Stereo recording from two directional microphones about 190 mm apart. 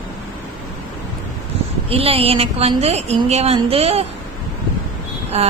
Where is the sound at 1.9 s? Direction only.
30° right (ahead or behind).